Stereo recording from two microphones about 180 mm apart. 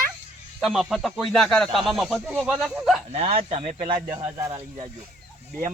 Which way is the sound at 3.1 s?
35° right (ahead or behind).